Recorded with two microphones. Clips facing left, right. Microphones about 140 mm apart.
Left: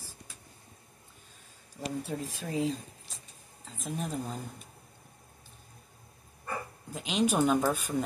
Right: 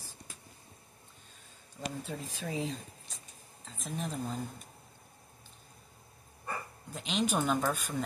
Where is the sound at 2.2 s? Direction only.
Centre (ahead or behind).